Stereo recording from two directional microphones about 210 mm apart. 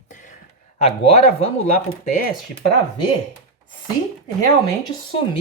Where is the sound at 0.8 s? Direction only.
30° left (ahead or behind).